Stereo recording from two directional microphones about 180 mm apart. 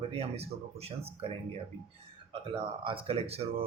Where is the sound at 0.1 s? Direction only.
35° right (ahead or behind).